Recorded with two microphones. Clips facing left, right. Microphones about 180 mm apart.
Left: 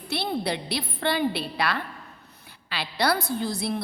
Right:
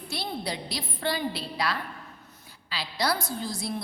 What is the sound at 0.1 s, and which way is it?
A woman's voice, 65° left (ahead or behind).